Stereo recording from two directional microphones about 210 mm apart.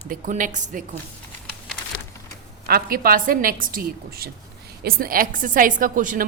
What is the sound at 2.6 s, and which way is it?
A woman's voice, 45° right (ahead or behind).